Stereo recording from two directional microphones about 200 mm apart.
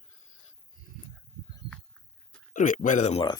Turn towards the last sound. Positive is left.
turn(degrees=30)  # may be behind; listen again after turning